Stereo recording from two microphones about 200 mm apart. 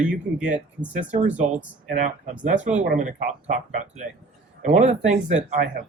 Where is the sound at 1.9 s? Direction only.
40° right (ahead or behind).